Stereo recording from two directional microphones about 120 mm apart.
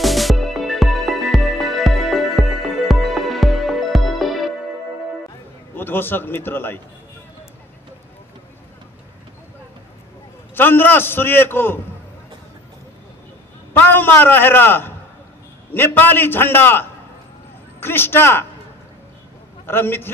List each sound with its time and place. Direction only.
0.0 s music: centre (ahead or behind)
5.8 s a man's voice: 15° left (ahead or behind)
10.5 s a man's voice: 15° left (ahead or behind)
13.7 s a man's voice: 15° left (ahead or behind)
19.6 s a man's voice: 20° left (ahead or behind)